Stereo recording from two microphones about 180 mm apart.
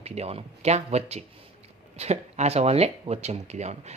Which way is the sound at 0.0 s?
35° right (ahead or behind).